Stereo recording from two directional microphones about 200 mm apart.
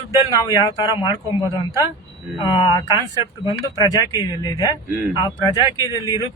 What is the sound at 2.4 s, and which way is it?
Speech, 15° left (ahead or behind).